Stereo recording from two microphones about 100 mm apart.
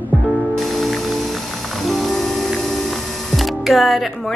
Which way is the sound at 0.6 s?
Centre (ahead or behind).